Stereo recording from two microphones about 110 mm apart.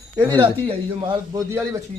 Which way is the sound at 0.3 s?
45° right (ahead or behind).